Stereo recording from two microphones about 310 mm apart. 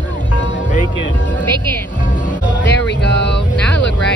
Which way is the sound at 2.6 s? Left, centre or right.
Left.